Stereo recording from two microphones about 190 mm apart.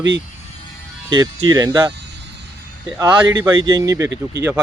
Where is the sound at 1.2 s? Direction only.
20° right (ahead or behind).